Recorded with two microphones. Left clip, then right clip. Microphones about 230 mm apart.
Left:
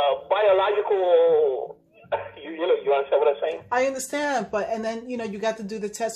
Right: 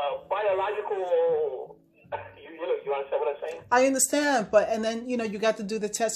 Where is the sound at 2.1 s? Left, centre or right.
Left.